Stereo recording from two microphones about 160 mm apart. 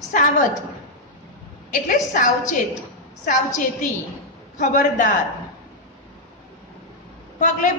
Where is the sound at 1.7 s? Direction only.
55° left (ahead or behind).